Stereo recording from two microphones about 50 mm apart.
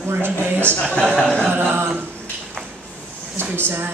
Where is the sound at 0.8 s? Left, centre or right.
Centre.